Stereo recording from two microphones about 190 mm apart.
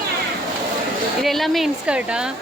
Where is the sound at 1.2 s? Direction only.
Centre (ahead or behind).